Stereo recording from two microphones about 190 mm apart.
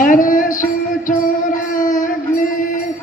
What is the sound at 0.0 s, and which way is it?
Music, 45° left (ahead or behind).